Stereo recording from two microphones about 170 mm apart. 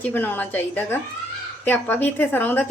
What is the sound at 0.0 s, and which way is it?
Speech, 10° left (ahead or behind).